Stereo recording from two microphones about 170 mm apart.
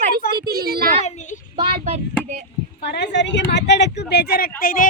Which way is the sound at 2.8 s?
85° left.